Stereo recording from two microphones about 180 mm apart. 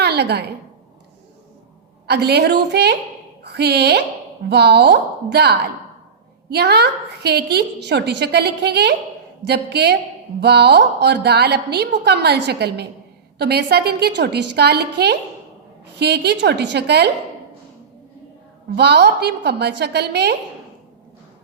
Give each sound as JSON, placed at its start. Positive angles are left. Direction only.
{"t": 0.0, "sound": "a woman's voice", "side_deg": -65}
{"t": 2.0, "sound": "a woman's voice", "side_deg": -65}
{"t": 18.8, "sound": "a woman's voice", "side_deg": -65}